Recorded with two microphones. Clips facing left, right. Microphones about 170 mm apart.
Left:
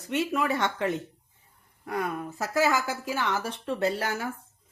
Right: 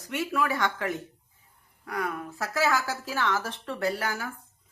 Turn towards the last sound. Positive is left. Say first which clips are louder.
# left 2 dB
turn(degrees=25)  # may be behind; listen again after turning